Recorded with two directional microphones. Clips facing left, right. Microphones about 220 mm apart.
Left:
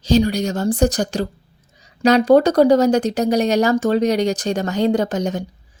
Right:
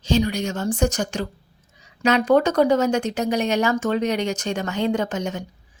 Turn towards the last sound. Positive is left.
turn(degrees=35)  # may be behind; listen again after turning